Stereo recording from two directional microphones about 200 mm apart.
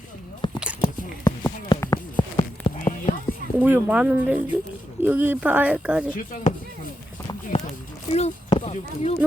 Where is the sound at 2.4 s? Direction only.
30° left (ahead or behind).